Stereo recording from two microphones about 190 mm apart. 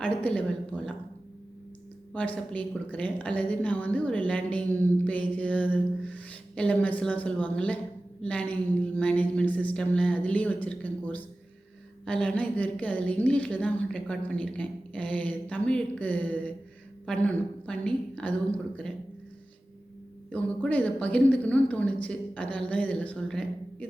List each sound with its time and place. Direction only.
0.0 s a woman's voice: 5° left (ahead or behind)
2.1 s a woman's voice: 5° left (ahead or behind)
20.3 s a woman's voice: 10° left (ahead or behind)